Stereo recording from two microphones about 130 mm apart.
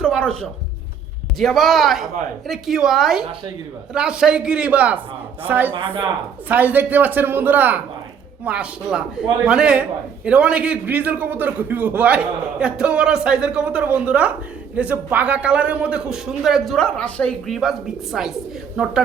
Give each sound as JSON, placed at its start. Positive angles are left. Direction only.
{"t": 1.4, "sound": "a man's voice", "side_deg": 0}
{"t": 5.7, "sound": "speech", "side_deg": -40}
{"t": 6.5, "sound": "a man's voice", "side_deg": -15}